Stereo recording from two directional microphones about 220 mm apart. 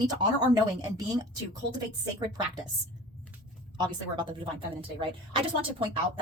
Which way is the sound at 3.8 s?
20° right (ahead or behind).